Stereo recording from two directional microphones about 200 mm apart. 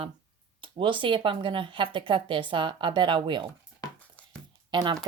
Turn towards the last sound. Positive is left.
turn(degrees=-20)  # may be behind; listen again after turning